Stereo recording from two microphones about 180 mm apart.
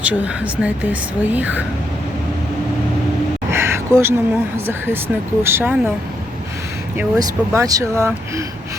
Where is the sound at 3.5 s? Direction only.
15° right (ahead or behind).